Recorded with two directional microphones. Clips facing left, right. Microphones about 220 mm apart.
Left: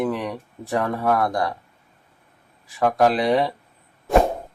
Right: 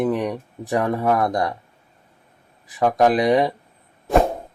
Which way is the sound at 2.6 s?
20° right (ahead or behind).